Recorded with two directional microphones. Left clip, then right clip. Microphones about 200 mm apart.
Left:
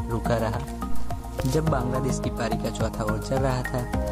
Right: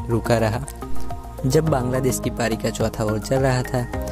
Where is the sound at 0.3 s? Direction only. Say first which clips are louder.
Right 6 dB; 35° right (ahead or behind).